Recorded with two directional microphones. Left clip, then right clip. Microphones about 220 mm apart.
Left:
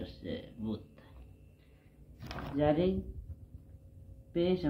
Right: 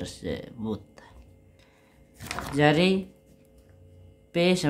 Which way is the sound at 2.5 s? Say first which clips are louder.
Right 8 dB; 70° right (ahead or behind).